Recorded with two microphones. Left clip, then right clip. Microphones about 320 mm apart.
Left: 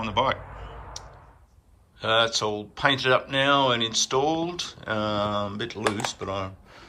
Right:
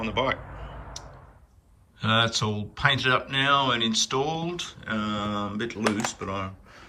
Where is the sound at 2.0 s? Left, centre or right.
Centre.